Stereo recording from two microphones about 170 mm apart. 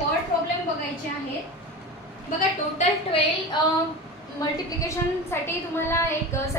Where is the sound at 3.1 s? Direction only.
35° left (ahead or behind).